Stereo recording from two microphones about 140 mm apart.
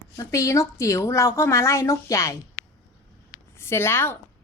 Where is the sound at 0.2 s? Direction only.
25° left (ahead or behind).